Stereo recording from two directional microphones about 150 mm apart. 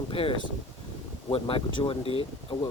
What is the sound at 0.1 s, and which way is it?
Speech, 35° left (ahead or behind).